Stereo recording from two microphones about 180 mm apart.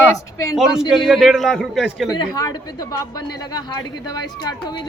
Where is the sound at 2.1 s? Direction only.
20° left (ahead or behind).